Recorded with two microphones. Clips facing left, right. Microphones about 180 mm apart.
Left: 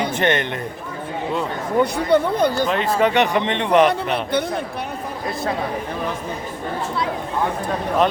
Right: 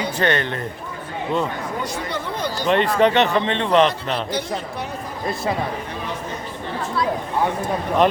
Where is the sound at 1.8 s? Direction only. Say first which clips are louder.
Left 10 dB; 60° left (ahead or behind).